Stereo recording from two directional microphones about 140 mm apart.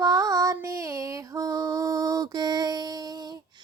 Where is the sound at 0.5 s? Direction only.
20° right (ahead or behind).